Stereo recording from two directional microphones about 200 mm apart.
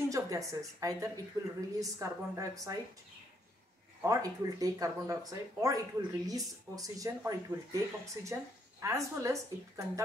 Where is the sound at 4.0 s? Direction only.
15° right (ahead or behind).